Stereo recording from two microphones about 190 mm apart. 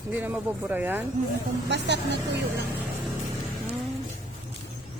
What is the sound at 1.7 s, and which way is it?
Speech, 65° right (ahead or behind).